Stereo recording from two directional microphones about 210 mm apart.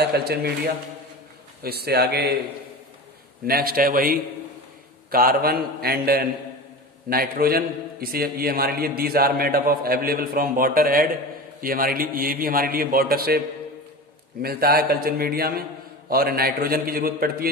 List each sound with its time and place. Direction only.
0.0 s a man's voice: 50° right (ahead or behind)
3.4 s a man's voice: 45° right (ahead or behind)
14.4 s a man's voice: 45° right (ahead or behind)